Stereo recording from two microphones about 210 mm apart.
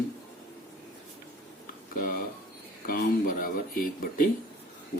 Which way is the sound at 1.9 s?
45° left (ahead or behind).